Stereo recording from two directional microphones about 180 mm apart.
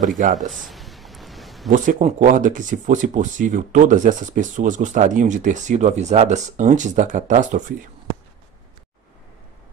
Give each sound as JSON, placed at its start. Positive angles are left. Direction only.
{"t": 0.2, "sound": "speech", "side_deg": -40}
{"t": 0.5, "sound": "a sound", "side_deg": 0}
{"t": 1.7, "sound": "speech", "side_deg": -45}